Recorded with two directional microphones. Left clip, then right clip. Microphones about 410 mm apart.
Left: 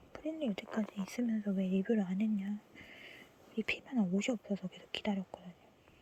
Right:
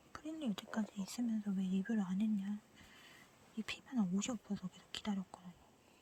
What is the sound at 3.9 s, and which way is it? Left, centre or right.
Speech, centre.